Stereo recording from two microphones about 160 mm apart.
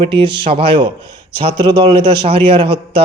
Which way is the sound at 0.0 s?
30° right (ahead or behind).